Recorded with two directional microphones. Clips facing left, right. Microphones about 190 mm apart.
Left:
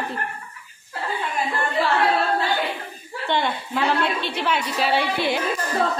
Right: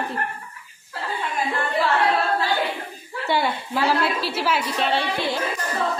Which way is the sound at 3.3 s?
5° right (ahead or behind).